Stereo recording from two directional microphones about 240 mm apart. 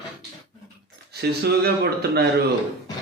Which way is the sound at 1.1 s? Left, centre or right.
Right.